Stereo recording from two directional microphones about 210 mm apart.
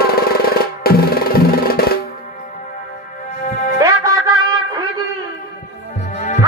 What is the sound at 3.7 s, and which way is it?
Music, 15° right (ahead or behind).